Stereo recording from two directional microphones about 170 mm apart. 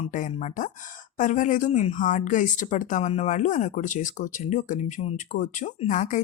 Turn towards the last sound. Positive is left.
turn(degrees=45)  # may be behind; listen again after turning